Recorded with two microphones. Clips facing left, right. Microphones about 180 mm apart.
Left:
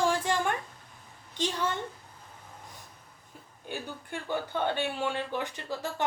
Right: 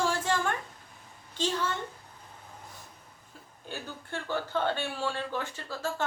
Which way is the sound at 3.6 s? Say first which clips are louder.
Left 2 dB; 15° left (ahead or behind).